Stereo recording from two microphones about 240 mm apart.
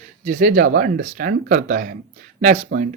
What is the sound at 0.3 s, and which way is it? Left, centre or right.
Speech, right.